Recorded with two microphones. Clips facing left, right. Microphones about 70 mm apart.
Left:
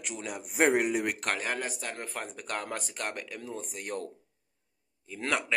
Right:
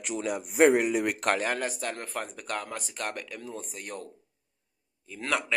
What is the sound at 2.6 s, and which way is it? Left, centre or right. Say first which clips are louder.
Speech: left 1 dB; left.